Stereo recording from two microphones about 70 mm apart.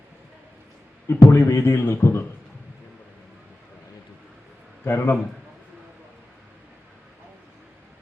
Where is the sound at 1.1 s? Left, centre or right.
Left.